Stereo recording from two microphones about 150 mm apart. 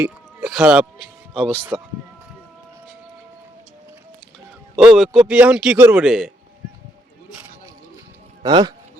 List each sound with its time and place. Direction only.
0.0 s speech: 5° right (ahead or behind)
4.8 s speech: 5° right (ahead or behind)
8.4 s speech: 25° right (ahead or behind)